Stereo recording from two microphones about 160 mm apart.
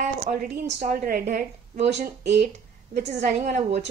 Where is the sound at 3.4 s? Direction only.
50° right (ahead or behind).